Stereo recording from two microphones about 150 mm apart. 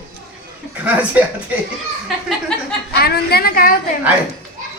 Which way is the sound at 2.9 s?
90° left.